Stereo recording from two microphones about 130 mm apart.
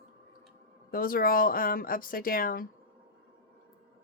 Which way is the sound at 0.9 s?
90° left.